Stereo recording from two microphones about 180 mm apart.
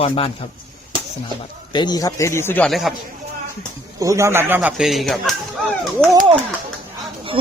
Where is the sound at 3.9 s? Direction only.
15° right (ahead or behind); by 5.3 s centre (ahead or behind).